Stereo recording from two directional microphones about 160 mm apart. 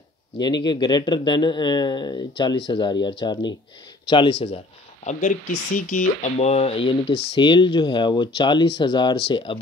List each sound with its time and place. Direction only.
0.7 s speech: 25° left (ahead or behind)
5.0 s speech: 50° left (ahead or behind); by 9.6 s 30° left (ahead or behind)